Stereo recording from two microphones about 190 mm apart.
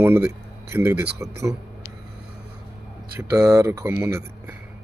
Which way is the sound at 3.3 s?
15° right (ahead or behind).